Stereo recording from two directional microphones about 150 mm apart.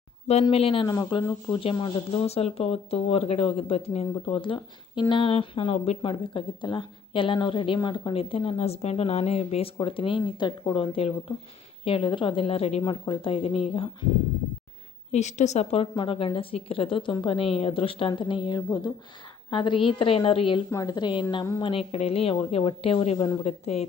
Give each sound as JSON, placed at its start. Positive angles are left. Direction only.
{"t": 0.5, "sound": "speech", "side_deg": 40}
{"t": 0.9, "sound": "a woman's voice", "side_deg": 25}
{"t": 1.8, "sound": "speech", "side_deg": 45}
{"t": 15.1, "sound": "speech", "side_deg": 50}
{"t": 20.7, "sound": "a woman's voice", "side_deg": 25}
{"t": 23.4, "sound": "a woman's voice", "side_deg": 45}